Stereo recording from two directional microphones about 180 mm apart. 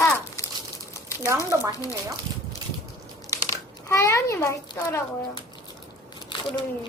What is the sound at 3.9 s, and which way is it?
A child's voice, 15° left (ahead or behind).